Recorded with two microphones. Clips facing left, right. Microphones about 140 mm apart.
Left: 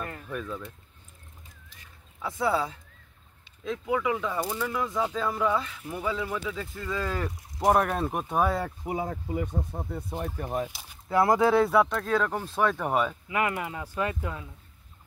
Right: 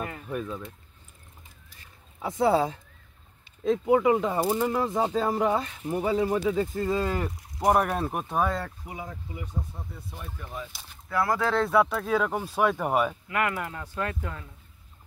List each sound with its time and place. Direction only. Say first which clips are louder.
0.3 s speech: right 2 dB; 25° right (ahead or behind)
2.1 s speech: right 4 dB; 25° right (ahead or behind)
2.5 s speech: right 4 dB; 35° right (ahead or behind)
6.9 s speech: right 4 dB; 25° right (ahead or behind)
7.5 s speech: even; centre (ahead or behind)
9.0 s speech: left 8 dB; 50° left (ahead or behind)
11.1 s speech: left 4 dB; 20° left (ahead or behind); by 13.2 s 5° right (ahead or behind)
13.3 s speech: even; 15° left (ahead or behind)